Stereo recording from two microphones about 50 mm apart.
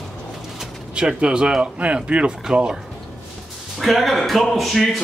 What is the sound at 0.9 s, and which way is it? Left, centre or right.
Speech, centre.